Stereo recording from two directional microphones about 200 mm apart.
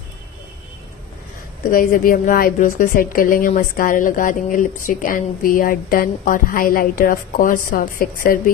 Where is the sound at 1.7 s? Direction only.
45° left (ahead or behind).